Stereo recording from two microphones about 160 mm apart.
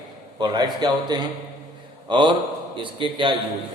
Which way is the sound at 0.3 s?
25° right (ahead or behind).